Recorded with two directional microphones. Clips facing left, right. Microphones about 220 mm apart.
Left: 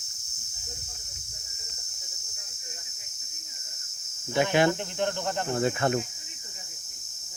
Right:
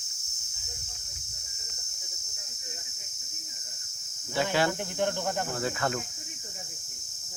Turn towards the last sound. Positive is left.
turn(degrees=25)  # may be behind; listen again after turning